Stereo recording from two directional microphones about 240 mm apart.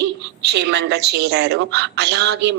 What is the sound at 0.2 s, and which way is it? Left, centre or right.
A woman's voice, right.